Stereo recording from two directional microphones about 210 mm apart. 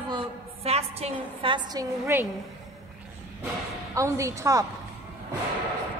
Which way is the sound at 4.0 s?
15° right (ahead or behind).